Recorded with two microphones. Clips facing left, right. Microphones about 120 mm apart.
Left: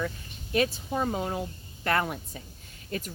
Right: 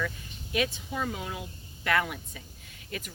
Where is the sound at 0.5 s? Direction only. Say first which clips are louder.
Left 4 dB; 40° left (ahead or behind).